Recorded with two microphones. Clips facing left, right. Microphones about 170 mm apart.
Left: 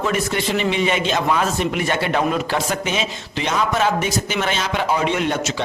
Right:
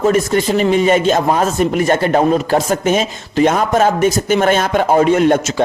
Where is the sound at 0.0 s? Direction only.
40° right (ahead or behind).